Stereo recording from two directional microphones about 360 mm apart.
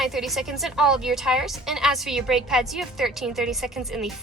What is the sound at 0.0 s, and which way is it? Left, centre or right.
A woman's voice, centre.